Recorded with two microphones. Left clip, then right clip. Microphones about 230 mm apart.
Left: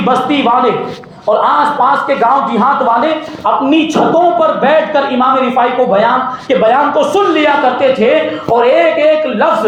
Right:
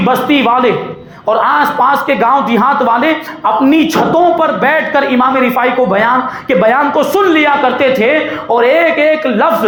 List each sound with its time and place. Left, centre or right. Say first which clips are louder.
0.1 s speech: even; right
6.5 s speech: even; right